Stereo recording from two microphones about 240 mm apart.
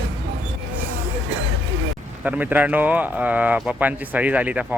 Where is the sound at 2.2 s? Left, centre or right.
Centre.